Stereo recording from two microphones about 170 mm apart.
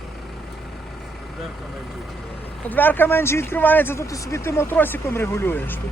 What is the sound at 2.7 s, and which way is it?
Speech, 10° left (ahead or behind).